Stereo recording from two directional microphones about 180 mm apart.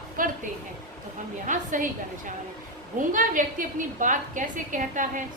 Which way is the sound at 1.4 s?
45° right (ahead or behind).